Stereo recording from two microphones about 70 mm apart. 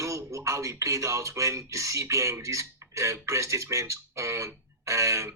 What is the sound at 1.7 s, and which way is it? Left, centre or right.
A man's voice, right.